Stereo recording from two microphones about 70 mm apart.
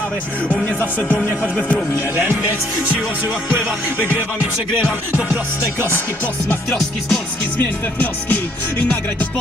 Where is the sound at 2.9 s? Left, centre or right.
Centre.